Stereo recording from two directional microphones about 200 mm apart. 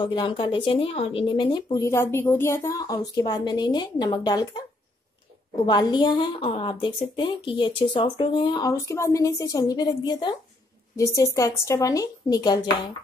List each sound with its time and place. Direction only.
0.0 s speech: 25° left (ahead or behind)
5.7 s a woman's voice: 20° left (ahead or behind)